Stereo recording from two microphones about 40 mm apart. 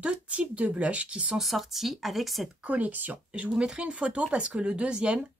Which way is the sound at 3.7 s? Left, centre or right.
Centre.